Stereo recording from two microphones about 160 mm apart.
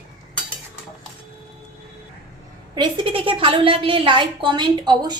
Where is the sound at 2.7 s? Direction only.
30° right (ahead or behind).